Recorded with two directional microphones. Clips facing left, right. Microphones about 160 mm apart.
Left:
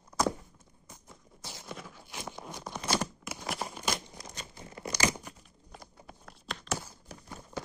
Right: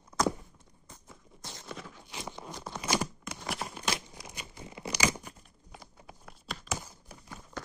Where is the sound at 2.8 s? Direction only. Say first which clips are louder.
Even; 10° right (ahead or behind).